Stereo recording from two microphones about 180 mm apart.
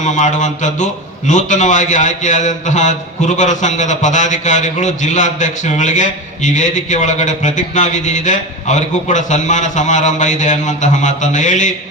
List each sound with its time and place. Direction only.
0.0 s a man's voice: 45° left (ahead or behind)